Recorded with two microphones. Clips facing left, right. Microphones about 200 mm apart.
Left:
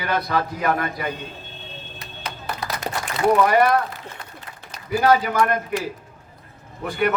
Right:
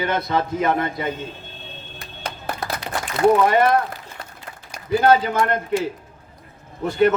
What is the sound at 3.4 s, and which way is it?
Speech, 25° right (ahead or behind).